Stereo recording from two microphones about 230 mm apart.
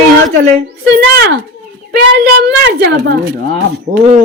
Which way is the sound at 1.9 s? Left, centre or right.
Right.